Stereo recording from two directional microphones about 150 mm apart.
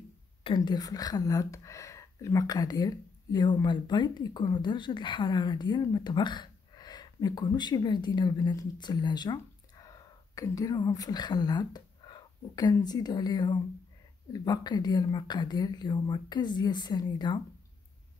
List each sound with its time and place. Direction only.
0.6 s speech: 25° left (ahead or behind)